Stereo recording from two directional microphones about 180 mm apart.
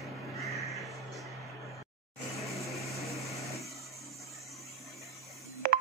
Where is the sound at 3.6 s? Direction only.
Centre (ahead or behind).